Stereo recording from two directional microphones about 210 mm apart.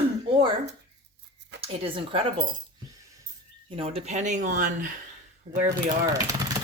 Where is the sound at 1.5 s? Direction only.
25° right (ahead or behind).